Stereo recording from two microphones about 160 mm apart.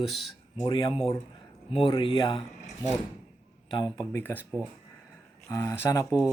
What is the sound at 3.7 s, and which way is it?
Speech, 25° left (ahead or behind).